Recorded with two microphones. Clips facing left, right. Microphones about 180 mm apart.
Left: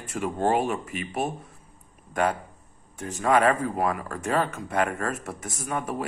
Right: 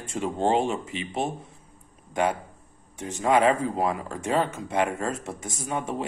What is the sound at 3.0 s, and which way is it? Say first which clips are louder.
Speech: even; 20° right (ahead or behind).